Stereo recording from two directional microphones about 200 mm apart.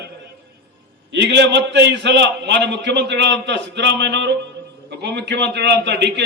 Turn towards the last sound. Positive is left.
turn(degrees=-60)  # may be behind; listen again after turning